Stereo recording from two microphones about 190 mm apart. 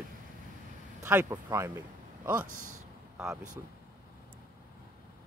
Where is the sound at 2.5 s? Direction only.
90° right.